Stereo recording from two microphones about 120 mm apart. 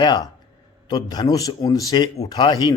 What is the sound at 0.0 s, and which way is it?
A man's voice, 35° left (ahead or behind).